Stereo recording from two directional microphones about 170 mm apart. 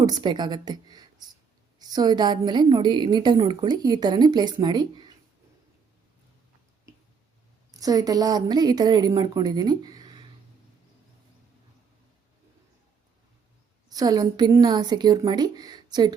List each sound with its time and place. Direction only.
0.0 s a woman's voice: 25° right (ahead or behind)
7.7 s a woman's voice: 20° right (ahead or behind)
13.9 s a woman's voice: 20° right (ahead or behind)